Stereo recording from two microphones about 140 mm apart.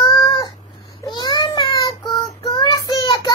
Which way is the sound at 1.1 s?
30° left (ahead or behind).